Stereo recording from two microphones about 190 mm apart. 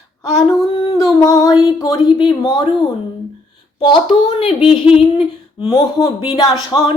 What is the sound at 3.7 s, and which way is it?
Speech, 25° left (ahead or behind).